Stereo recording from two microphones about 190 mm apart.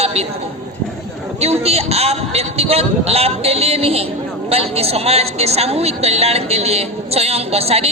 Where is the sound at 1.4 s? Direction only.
35° right (ahead or behind).